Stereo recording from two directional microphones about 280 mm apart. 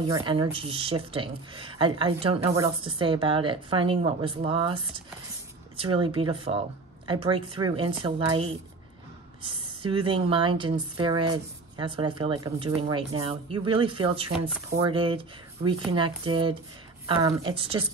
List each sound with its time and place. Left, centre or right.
0.0 s speech: centre